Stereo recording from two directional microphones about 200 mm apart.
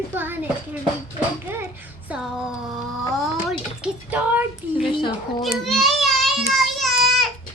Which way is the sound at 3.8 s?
10° right (ahead or behind).